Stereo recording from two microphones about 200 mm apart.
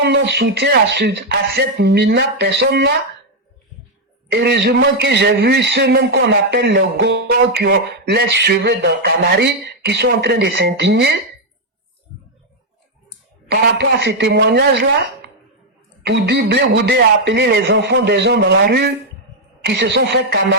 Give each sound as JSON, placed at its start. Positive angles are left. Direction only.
{"t": 0.0, "sound": "a man's voice", "side_deg": -60}
{"t": 4.3, "sound": "a man's voice", "side_deg": -60}
{"t": 13.5, "sound": "a man's voice", "side_deg": -55}